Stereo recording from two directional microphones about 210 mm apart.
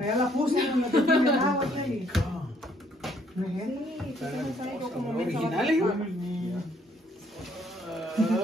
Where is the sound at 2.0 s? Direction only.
Centre (ahead or behind).